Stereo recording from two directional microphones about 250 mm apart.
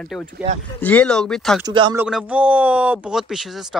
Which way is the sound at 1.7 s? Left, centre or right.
Centre.